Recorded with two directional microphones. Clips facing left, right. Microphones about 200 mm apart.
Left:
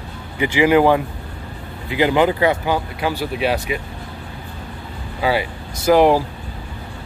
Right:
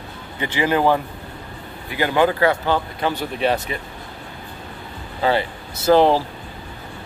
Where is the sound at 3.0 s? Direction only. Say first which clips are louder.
Left 1 dB; 10° left (ahead or behind).